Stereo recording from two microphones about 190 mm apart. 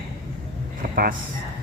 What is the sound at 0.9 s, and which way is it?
Speech, 50° right (ahead or behind).